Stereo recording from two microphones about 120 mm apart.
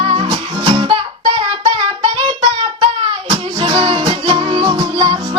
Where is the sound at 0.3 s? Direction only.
45° right (ahead or behind).